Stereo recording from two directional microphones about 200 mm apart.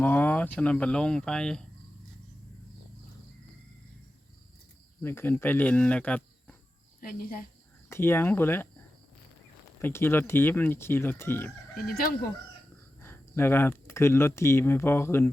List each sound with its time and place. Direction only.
0.0 s speech: 10° left (ahead or behind)
5.0 s speech: 10° left (ahead or behind)
7.0 s speech: 45° left (ahead or behind)
7.9 s speech: 10° left (ahead or behind)
9.8 s speech: 10° left (ahead or behind)
13.0 s speech: 10° left (ahead or behind)